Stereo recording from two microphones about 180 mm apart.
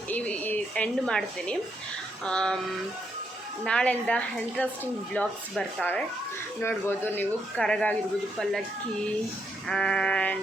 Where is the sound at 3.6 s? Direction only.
5° left (ahead or behind).